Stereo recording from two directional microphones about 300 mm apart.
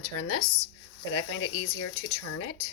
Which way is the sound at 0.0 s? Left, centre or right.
Left.